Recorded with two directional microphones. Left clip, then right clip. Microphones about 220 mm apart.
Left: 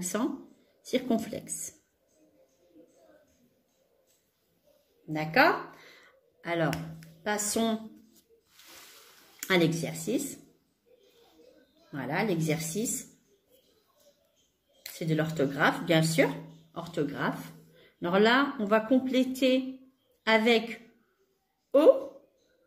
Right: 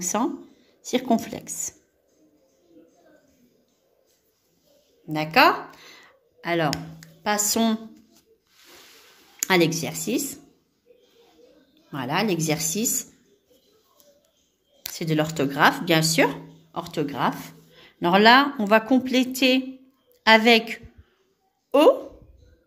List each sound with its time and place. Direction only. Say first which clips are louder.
0.0 s a woman's voice: right 7 dB; 30° right (ahead or behind)
2.8 s music: right 4 dB; 5° left (ahead or behind)
5.1 s a sound: right 6 dB; 50° right (ahead or behind)
7.2 s a woman's voice: right 6 dB; 45° right (ahead or behind)
9.4 s a woman's voice: right 6 dB; 40° right (ahead or behind)
11.9 s a woman's voice: right 6 dB; 45° right (ahead or behind)
15.0 s a woman's voice: right 5 dB; 50° right (ahead or behind)